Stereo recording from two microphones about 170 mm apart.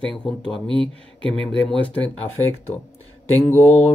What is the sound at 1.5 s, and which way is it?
Speech, 5° left (ahead or behind).